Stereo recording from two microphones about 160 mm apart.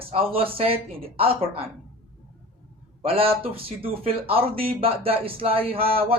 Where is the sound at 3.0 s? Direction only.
35° right (ahead or behind).